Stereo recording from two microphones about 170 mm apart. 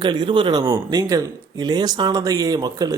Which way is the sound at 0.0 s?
25° right (ahead or behind).